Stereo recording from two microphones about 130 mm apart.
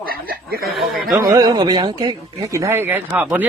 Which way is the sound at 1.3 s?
30° right (ahead or behind).